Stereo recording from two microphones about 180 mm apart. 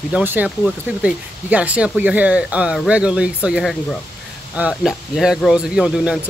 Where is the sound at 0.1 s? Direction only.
10° right (ahead or behind).